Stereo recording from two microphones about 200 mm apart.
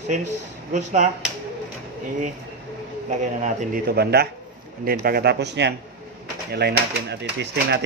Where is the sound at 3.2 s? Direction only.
40° right (ahead or behind).